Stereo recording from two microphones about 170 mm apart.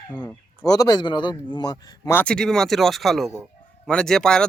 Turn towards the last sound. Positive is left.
turn(degrees=5)  # may be behind; listen again after turning